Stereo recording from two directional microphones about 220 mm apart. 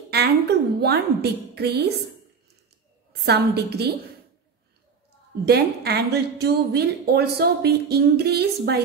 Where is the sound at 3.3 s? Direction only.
50° right (ahead or behind).